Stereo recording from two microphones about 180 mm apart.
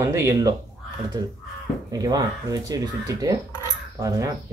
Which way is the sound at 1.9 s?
20° right (ahead or behind).